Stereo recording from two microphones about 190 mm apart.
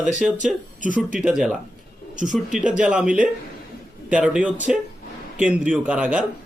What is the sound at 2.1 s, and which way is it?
Speech, 40° right (ahead or behind).